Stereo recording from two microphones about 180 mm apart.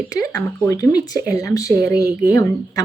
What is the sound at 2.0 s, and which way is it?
Speech, 15° right (ahead or behind).